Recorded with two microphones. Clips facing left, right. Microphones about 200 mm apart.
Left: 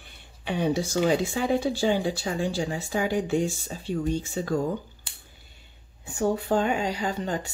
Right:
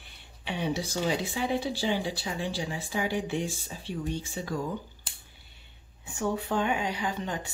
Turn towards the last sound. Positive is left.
turn(degrees=40)  # may be behind; listen again after turning